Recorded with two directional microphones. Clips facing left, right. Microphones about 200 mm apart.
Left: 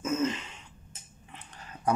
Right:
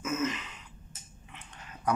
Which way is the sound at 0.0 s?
30° left (ahead or behind).